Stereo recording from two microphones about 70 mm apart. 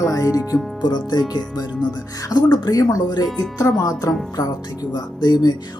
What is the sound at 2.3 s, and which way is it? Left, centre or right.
Speech, left.